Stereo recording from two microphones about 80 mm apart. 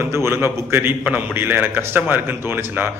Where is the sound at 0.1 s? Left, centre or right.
Right.